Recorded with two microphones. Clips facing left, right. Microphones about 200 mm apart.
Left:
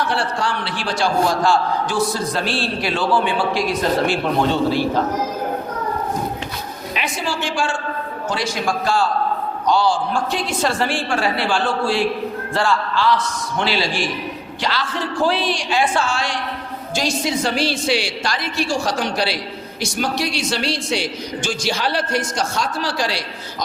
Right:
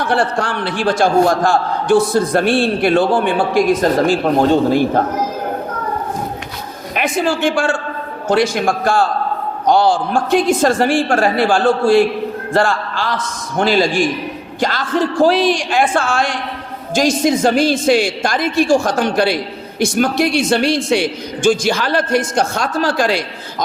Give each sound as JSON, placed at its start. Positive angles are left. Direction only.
{"t": 0.1, "sound": "a man's voice", "side_deg": -55}
{"t": 6.9, "sound": "a man's voice", "side_deg": -50}